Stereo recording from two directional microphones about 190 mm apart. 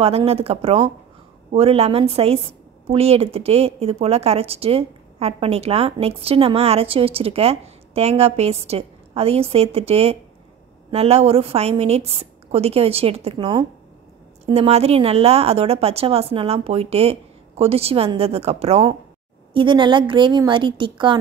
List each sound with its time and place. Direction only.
0.0 s a woman's voice: 30° right (ahead or behind)